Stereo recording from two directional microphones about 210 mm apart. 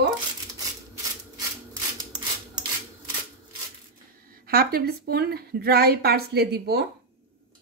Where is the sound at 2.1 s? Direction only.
20° right (ahead or behind).